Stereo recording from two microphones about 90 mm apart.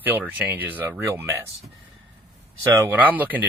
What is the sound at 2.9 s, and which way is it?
Speech, 20° right (ahead or behind).